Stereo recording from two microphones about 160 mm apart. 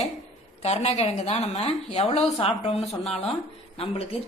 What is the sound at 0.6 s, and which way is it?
Speech, 40° left (ahead or behind).